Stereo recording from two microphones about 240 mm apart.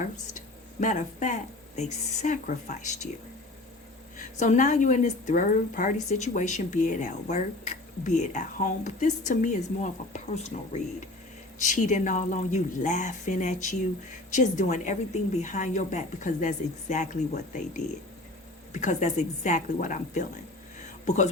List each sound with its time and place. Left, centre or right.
0.8 s a woman's voice: left
4.2 s a woman's voice: left